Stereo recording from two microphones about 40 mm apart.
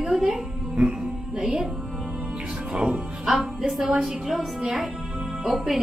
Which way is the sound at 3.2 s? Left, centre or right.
Centre.